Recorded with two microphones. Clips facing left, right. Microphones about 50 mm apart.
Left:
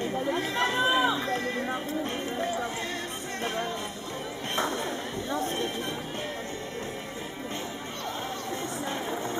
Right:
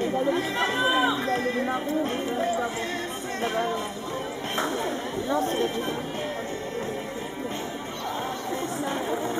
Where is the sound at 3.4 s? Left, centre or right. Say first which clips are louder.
Right 5 dB; centre.